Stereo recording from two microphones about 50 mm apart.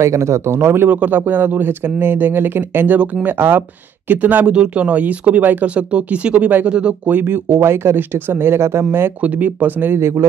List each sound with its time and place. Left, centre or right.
0.0 s speech: right
0.8 s speech: right
4.1 s speech: right
4.5 s speech: right
5.8 s speech: right
7.1 s speech: right
7.6 s speech: right
9.2 s speech: right
9.9 s speech: right